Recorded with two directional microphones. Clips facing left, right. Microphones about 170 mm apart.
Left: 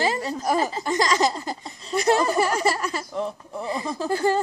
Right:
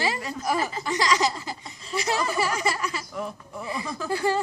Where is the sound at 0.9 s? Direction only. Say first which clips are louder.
Left 1 dB; 45° left (ahead or behind).